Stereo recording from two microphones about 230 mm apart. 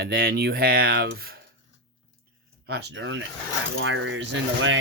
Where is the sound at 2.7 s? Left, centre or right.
Right.